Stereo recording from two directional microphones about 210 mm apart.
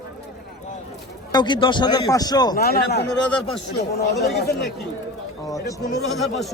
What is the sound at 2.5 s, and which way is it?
Speech, 50° left (ahead or behind).